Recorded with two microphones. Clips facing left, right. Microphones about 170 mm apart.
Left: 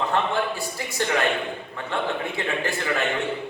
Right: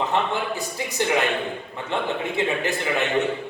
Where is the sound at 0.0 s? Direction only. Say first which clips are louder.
Even; 20° right (ahead or behind).